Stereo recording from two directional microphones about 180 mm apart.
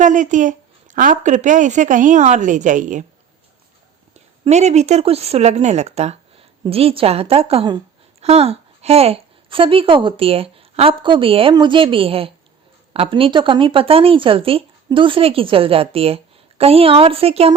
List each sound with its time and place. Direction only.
0.0 s speech: 45° right (ahead or behind)
4.1 s speech: 40° right (ahead or behind)